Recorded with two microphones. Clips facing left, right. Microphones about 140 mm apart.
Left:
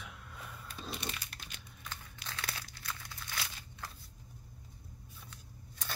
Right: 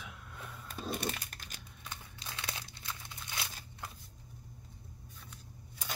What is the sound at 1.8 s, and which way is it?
Crumpling, 20° right (ahead or behind).